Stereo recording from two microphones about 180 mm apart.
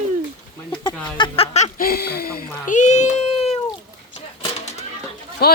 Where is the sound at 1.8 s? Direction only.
60° left (ahead or behind); by 3.6 s 35° left (ahead or behind).